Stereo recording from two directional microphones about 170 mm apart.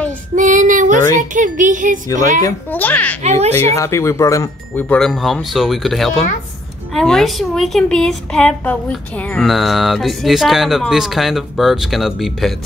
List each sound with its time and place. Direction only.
0.4 s child singing: 50° right (ahead or behind)
1.3 s a child's voice: 50° right (ahead or behind)
2.4 s a child's voice: 10° left (ahead or behind)
3.2 s speech: 40° right (ahead or behind)
3.5 s a woman's voice: 15° left (ahead or behind); by 12.5 s centre (ahead or behind)